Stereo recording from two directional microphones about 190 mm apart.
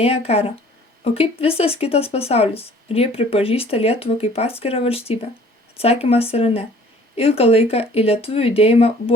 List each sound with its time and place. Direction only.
0.0 s speech: 30° left (ahead or behind)